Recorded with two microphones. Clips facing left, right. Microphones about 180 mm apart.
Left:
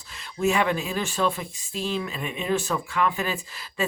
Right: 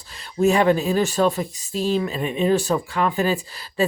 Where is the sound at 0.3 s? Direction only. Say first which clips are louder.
Right 6 dB; 35° right (ahead or behind).